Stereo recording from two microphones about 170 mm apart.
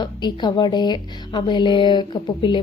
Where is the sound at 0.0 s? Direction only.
25° left (ahead or behind).